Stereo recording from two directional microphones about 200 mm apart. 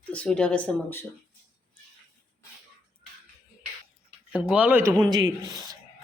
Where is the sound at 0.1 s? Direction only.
5° left (ahead or behind).